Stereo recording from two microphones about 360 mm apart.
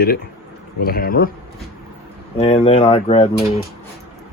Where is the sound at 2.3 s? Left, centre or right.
Centre.